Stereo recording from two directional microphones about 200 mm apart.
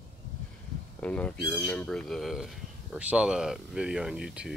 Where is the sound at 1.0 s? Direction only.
5° left (ahead or behind).